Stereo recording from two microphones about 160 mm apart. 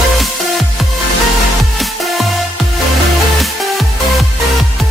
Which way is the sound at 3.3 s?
Centre (ahead or behind).